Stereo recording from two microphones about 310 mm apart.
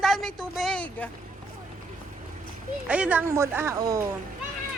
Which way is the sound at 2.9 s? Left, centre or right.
Centre.